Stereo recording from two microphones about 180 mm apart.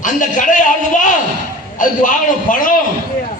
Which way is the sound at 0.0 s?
45° left (ahead or behind).